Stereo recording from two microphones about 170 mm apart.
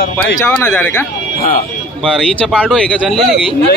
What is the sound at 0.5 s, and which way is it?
Speech, 10° left (ahead or behind).